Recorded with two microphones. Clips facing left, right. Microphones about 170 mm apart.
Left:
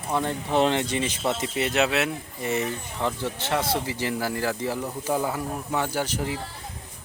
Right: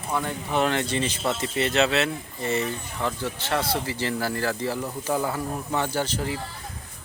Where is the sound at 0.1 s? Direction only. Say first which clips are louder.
Left 2 dB; 25° left (ahead or behind).